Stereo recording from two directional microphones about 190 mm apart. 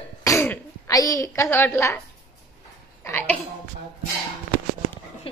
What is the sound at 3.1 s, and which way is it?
Speech, 10° left (ahead or behind).